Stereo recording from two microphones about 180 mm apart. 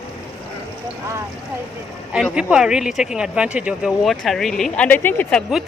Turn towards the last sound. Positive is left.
turn(degrees=10)  # may be behind; listen again after turning